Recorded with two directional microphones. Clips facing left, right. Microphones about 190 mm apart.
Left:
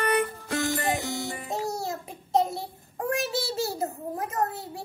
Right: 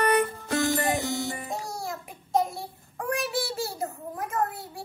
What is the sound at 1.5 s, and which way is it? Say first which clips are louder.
A child's voice: left 3 dB; 25° left (ahead or behind).